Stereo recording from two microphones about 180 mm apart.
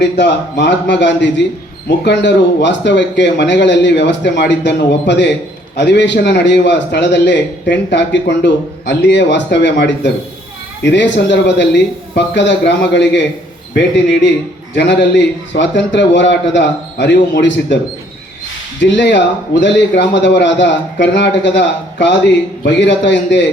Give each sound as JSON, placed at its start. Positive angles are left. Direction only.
{"t": 0.2, "sound": "a man's voice", "side_deg": 70}
{"t": 18.8, "sound": "speech", "side_deg": 75}